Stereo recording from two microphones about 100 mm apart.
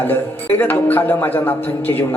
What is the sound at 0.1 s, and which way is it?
A man's voice, 20° left (ahead or behind).